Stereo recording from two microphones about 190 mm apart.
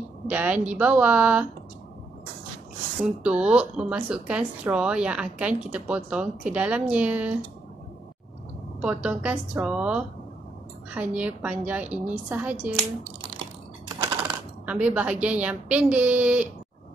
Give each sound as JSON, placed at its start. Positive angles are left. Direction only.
{"t": 0.3, "sound": "speech", "side_deg": -10}
{"t": 3.3, "sound": "speech", "side_deg": -5}
{"t": 8.8, "sound": "speech", "side_deg": -5}
{"t": 13.8, "sound": "typewriter", "side_deg": -25}
{"t": 14.7, "sound": "speech", "side_deg": -5}